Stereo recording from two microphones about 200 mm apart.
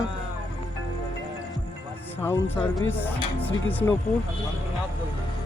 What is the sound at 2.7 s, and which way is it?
Speech, 10° left (ahead or behind).